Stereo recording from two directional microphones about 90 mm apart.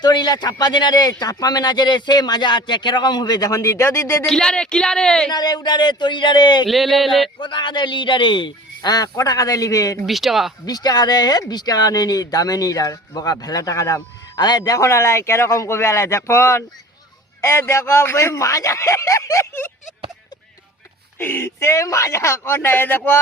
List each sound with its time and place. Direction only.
0.0 s speech: 55° left (ahead or behind); by 4.3 s 30° left (ahead or behind)
4.3 s a woman's voice: 10° left (ahead or behind)
5.3 s a man's voice: 50° left (ahead or behind)
6.7 s a sound: centre (ahead or behind)
7.3 s speech: 60° left (ahead or behind); by 10.0 s 40° left (ahead or behind)
10.1 s a sound: centre (ahead or behind)
10.7 s a man's voice: 45° left (ahead or behind); by 19.7 s 30° left (ahead or behind)
21.2 s speech: 25° left (ahead or behind)